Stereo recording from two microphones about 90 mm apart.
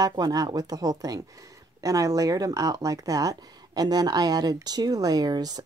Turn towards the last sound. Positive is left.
turn(degrees=-45)  # may be behind; listen again after turning